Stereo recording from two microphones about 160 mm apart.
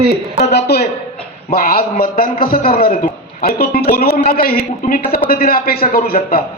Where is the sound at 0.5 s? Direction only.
90° left.